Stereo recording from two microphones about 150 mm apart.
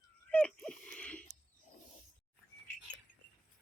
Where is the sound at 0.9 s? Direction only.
10° left (ahead or behind).